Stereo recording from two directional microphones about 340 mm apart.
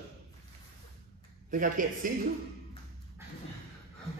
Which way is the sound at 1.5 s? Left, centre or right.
Right.